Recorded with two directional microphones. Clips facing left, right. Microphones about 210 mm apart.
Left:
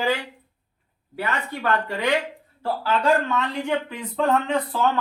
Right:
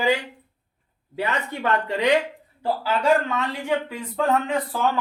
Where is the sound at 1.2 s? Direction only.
20° right (ahead or behind).